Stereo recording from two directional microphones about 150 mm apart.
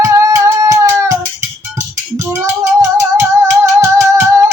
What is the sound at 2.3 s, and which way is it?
Music, 20° right (ahead or behind).